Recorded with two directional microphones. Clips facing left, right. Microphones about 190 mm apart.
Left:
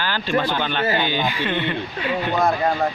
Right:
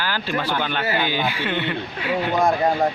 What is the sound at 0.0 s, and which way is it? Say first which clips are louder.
Speech: left 1 dB; 10° right (ahead or behind).